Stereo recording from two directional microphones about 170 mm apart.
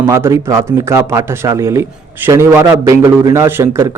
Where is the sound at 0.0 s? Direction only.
15° right (ahead or behind).